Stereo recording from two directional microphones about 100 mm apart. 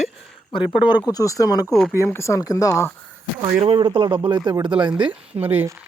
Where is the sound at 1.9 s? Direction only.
25° left (ahead or behind).